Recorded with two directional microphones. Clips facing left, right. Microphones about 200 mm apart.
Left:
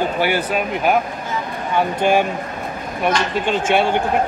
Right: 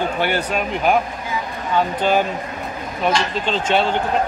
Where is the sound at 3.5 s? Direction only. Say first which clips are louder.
Left 2 dB; 10° left (ahead or behind).